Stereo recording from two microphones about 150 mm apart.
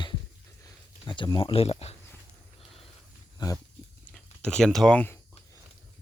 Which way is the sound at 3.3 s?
25° left (ahead or behind).